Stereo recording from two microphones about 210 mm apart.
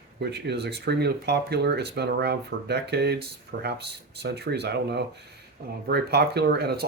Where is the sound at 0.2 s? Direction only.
50° right (ahead or behind).